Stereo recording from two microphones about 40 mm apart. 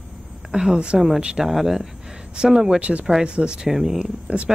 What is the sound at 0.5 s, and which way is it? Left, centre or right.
A woman's voice, centre.